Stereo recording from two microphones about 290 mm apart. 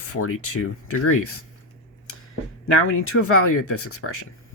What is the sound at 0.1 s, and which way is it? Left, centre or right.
Speech, left.